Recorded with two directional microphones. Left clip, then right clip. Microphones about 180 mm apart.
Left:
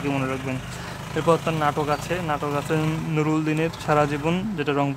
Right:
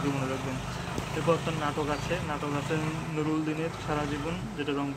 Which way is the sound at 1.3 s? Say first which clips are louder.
Left 8 dB; 40° left (ahead or behind).